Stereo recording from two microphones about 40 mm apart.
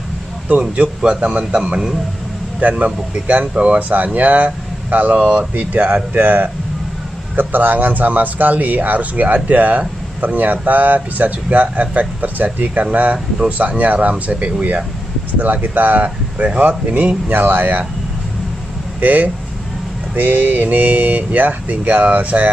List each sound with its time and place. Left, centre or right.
0.5 s speech: right
2.8 s speech: right
17.3 s speech: right
18.9 s speech: right